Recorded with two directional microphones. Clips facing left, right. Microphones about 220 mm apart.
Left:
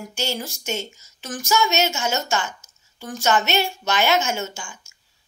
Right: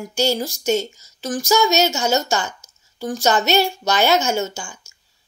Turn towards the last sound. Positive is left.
turn(degrees=-40)  # may be behind; listen again after turning